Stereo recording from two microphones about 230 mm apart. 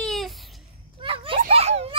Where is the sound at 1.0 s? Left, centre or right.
Right.